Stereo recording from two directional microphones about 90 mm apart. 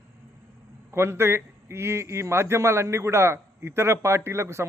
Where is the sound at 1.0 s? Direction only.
30° right (ahead or behind).